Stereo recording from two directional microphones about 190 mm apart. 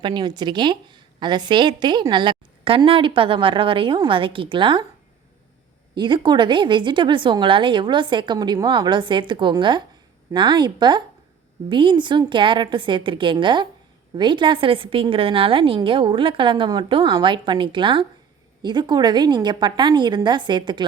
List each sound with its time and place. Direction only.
0.0 s a woman's voice: 25° right (ahead or behind)
6.0 s a woman's voice: 25° right (ahead or behind)